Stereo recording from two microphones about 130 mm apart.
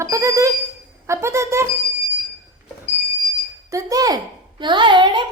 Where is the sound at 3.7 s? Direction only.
25° right (ahead or behind).